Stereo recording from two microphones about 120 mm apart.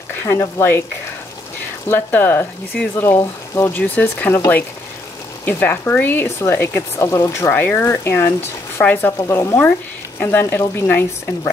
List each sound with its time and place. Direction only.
0.1 s speech: 20° left (ahead or behind)
1.9 s speech: 15° left (ahead or behind)
5.4 s speech: 15° left (ahead or behind)